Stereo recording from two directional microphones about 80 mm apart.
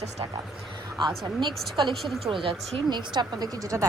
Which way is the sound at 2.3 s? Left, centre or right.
Right.